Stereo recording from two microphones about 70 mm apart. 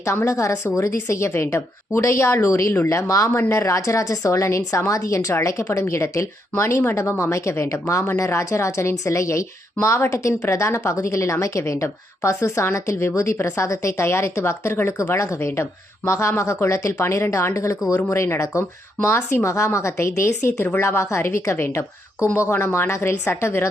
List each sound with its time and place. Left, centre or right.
0.0 s a woman's voice: left
3.3 s a woman's voice: left